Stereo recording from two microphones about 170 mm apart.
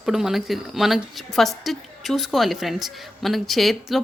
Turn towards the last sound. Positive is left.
turn(degrees=0)  # may be behind; listen again after turning